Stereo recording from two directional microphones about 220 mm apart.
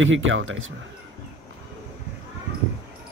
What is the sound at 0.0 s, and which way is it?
Speech, 60° right (ahead or behind).